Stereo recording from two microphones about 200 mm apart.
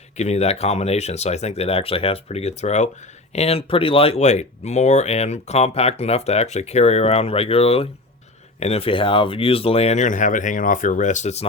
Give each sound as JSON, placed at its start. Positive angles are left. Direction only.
{"t": 0.2, "sound": "speech", "side_deg": 35}